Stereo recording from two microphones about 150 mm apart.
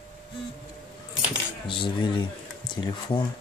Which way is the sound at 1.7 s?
30° left (ahead or behind).